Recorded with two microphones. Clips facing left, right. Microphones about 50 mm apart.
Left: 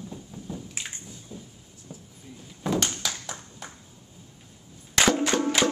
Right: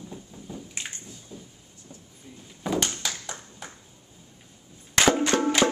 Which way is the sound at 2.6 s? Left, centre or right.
Centre.